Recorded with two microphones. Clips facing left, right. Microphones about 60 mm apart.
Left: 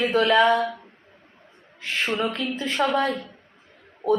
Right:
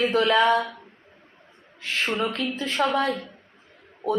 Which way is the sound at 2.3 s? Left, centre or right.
Centre.